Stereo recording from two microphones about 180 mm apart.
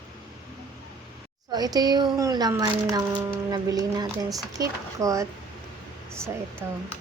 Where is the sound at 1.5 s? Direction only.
20° right (ahead or behind).